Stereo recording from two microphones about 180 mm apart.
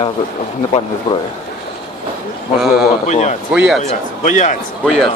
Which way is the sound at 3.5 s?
5° right (ahead or behind).